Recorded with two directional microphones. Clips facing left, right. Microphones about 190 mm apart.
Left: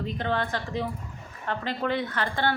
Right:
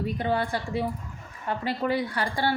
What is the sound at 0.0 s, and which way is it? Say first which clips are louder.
A woman's voice: right 2 dB; 10° right (ahead or behind).